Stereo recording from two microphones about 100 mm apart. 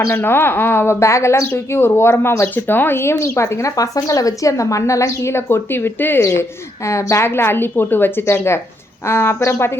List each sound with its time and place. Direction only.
0.1 s a woman's voice: 20° left (ahead or behind)